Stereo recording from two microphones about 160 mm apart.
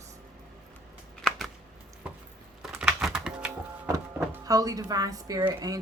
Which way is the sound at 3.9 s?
20° right (ahead or behind).